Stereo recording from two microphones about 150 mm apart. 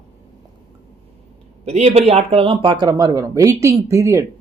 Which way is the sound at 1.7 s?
50° right (ahead or behind).